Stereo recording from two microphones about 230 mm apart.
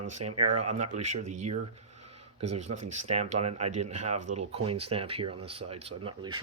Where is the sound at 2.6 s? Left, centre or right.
Right.